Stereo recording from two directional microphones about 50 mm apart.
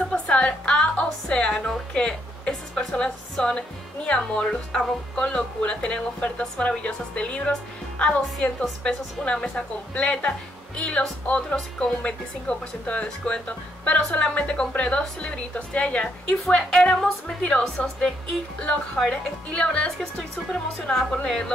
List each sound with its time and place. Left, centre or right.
0.1 s music: left
2.0 s a woman's voice: centre